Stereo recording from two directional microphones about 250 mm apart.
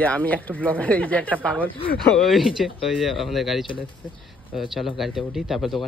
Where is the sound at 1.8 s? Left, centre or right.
Left.